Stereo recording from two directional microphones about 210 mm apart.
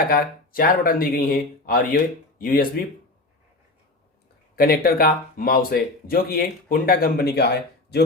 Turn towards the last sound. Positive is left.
turn(degrees=50)  # may be behind; listen again after turning